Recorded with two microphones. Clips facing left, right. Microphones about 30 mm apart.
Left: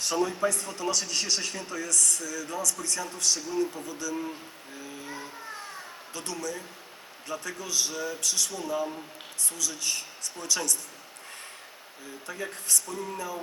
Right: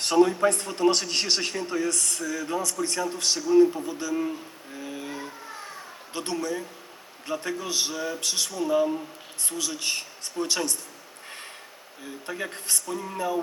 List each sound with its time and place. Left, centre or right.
0.0 s a man's voice: right
4.8 s a sound: right
6.1 s a man's voice: right
8.6 s a man's voice: right
12.2 s a man's voice: right